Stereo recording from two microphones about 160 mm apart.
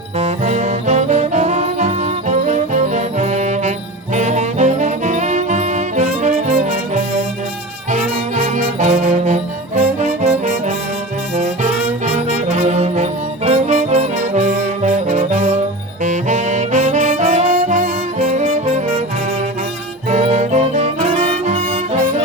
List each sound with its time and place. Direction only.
0.2 s music: 45° right (ahead or behind)
11.3 s brass instrument: 45° right (ahead or behind)
16.0 s saxophone: 50° right (ahead or behind)
20.1 s music: 50° right (ahead or behind)